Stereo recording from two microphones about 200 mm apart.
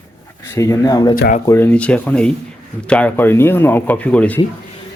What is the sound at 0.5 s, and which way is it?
Speech, 15° left (ahead or behind).